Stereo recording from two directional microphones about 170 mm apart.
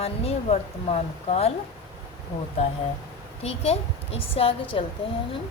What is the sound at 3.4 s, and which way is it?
A woman's voice, 35° left (ahead or behind).